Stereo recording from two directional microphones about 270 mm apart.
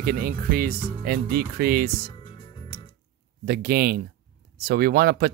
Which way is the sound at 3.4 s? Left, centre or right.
Right.